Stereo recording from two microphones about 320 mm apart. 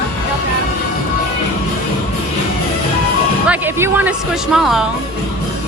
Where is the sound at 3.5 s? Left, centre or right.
Centre.